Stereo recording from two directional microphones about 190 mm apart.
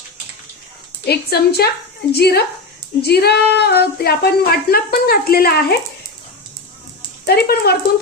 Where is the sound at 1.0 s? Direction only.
55° left (ahead or behind).